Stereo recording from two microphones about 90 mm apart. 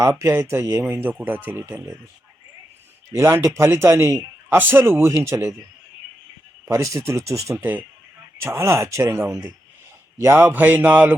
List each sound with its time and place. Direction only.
0.0 s speech: 35° right (ahead or behind)
3.1 s speech: 30° right (ahead or behind)
6.7 s speech: 35° right (ahead or behind)
7.5 s speech: 20° right (ahead or behind)